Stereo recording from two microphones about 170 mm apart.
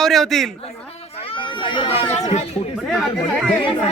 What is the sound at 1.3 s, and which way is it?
Speech, 30° left (ahead or behind).